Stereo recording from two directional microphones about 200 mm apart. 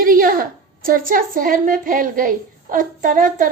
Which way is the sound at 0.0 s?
45° right (ahead or behind).